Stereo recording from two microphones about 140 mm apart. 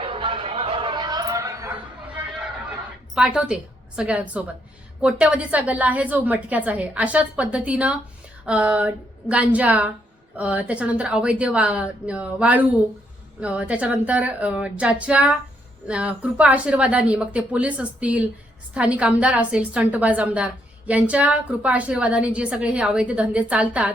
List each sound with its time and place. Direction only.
0.0 s chatter: 40° right (ahead or behind); by 1.7 s 20° right (ahead or behind)
3.2 s a woman's voice: 5° right (ahead or behind)